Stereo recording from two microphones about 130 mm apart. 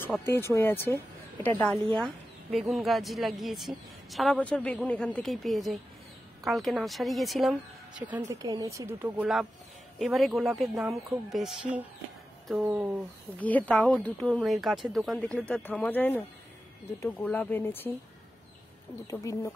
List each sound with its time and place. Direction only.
0.2 s speech: 20° left (ahead or behind)
2.0 s a sound: centre (ahead or behind)
2.7 s speech: centre (ahead or behind)
8.3 s speech: 30° right (ahead or behind)
9.0 s speech: 15° right (ahead or behind)
9.9 s speech: centre (ahead or behind)
13.4 s speech: 10° left (ahead or behind)
15.1 s speech: 10° left (ahead or behind)
19.0 s speech: 25° left (ahead or behind)